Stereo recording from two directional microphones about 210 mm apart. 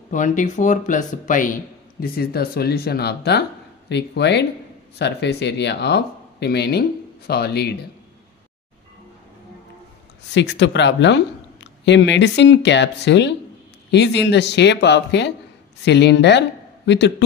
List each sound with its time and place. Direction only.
0.1 s a man's voice: 40° left (ahead or behind)
10.3 s speech: 55° left (ahead or behind)